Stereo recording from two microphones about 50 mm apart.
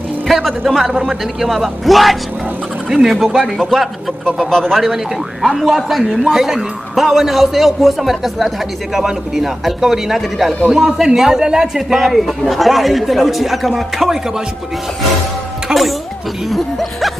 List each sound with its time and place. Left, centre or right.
0.3 s a man's voice: centre
3.7 s speech: centre
4.8 s a man's voice: centre
6.3 s a man's voice: centre
15.7 s a man's voice: centre
16.4 s a man's voice: centre